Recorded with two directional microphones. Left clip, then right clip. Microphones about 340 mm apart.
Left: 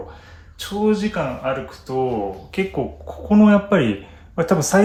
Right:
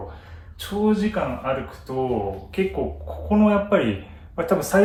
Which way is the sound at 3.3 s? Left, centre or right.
Left.